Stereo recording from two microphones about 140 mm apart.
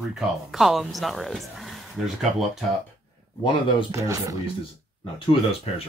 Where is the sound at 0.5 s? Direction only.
Centre (ahead or behind).